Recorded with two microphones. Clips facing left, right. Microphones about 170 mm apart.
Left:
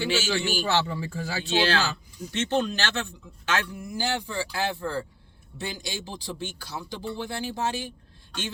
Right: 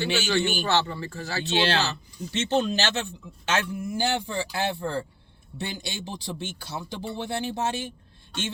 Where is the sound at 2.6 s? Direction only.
20° right (ahead or behind).